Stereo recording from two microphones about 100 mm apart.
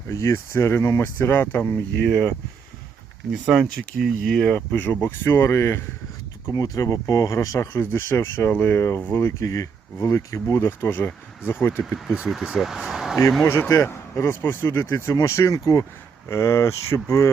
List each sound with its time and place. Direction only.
0.1 s speech: 30° left (ahead or behind)
3.4 s speech: 5° right (ahead or behind)
4.3 s speech: 10° left (ahead or behind)
11.8 s speech: centre (ahead or behind)
13.4 s speech: 25° left (ahead or behind)